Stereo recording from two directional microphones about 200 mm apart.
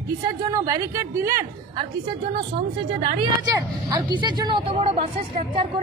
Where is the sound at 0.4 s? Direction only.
15° right (ahead or behind).